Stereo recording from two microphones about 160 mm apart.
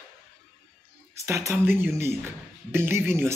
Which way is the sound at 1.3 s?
20° right (ahead or behind).